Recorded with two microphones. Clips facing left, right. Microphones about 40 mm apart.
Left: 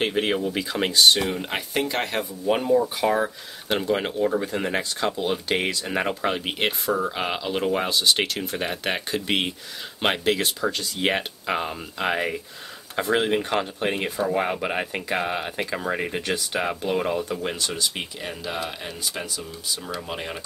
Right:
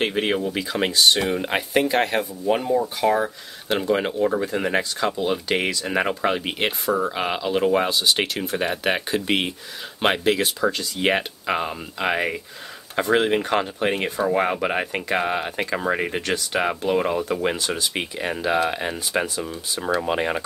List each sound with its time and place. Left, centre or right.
0.0 s speech: centre; by 16.7 s right
16.9 s speech: centre
17.9 s speech: right